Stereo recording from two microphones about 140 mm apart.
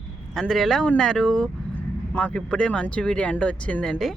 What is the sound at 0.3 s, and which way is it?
Speech, 5° left (ahead or behind).